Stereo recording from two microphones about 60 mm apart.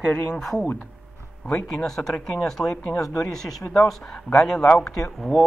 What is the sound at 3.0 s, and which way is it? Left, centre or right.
Speech, left.